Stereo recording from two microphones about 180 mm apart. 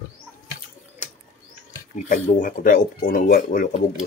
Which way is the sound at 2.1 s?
50° left (ahead or behind).